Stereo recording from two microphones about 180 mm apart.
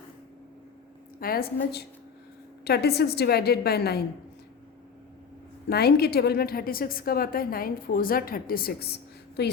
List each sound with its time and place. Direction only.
1.2 s a woman's voice: 55° left (ahead or behind)
5.6 s a woman's voice: 60° left (ahead or behind)